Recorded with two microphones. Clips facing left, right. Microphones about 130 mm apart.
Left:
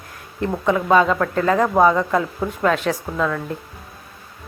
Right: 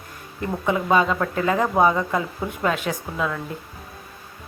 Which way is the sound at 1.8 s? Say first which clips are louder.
Left 3 dB; 5° right (ahead or behind).